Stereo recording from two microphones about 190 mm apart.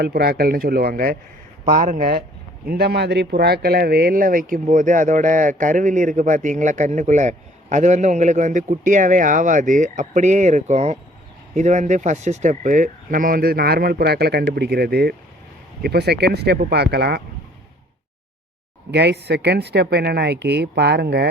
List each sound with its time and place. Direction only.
0.0 s speech: 55° right (ahead or behind)
2.6 s speech: 60° right (ahead or behind)
18.9 s speech: 65° right (ahead or behind)